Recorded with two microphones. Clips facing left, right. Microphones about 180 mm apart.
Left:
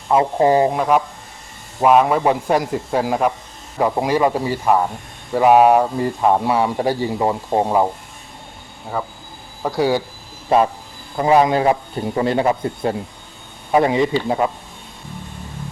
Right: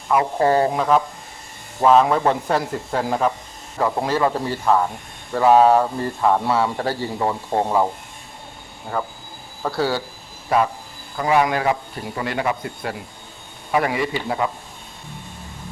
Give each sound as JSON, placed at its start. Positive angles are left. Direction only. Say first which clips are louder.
{"t": 0.1, "sound": "speech", "louder": "left 3 dB", "side_deg": 20}
{"t": 8.9, "sound": "speech", "louder": "left 1 dB", "side_deg": 10}
{"t": 10.5, "sound": "a man's voice", "louder": "left 4 dB", "side_deg": 25}